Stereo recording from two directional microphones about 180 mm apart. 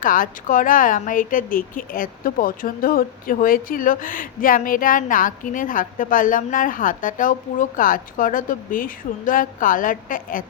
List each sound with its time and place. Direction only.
0.0 s a woman's voice: 50° left (ahead or behind)